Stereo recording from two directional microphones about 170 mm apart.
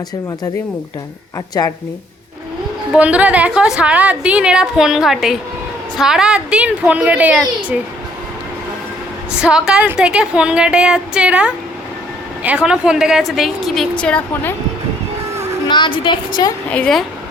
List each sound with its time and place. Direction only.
2.9 s a woman's voice: 10° right (ahead or behind)
9.4 s a woman's voice: 5° right (ahead or behind)
15.6 s a woman's voice: 25° left (ahead or behind)
16.6 s a woman's voice: 5° left (ahead or behind)